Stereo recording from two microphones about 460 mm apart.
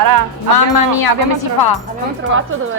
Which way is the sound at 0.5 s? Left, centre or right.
Left.